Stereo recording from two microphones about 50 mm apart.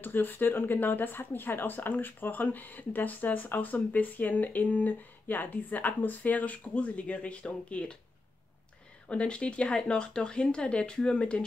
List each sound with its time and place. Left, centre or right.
0.0 s speech: left
9.1 s speech: left